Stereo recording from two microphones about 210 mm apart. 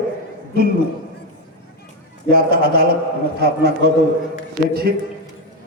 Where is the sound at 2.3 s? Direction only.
45° right (ahead or behind).